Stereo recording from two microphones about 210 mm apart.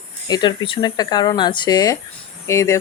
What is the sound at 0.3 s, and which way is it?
Speech, 20° left (ahead or behind).